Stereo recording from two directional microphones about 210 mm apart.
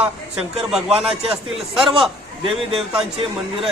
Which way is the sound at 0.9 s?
30° right (ahead or behind).